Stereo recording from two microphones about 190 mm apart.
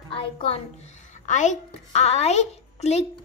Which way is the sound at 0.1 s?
30° left (ahead or behind).